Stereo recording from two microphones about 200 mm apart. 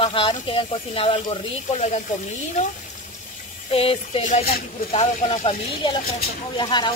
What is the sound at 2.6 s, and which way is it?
Speech, 35° left (ahead or behind).